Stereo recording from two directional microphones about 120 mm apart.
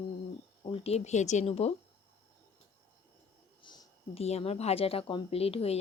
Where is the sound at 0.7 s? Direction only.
60° left (ahead or behind).